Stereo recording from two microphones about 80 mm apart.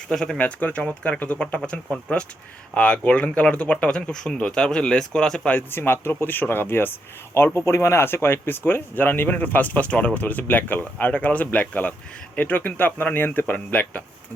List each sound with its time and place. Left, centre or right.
0.1 s speech: centre
0.3 s speech: centre
5.5 s speech: left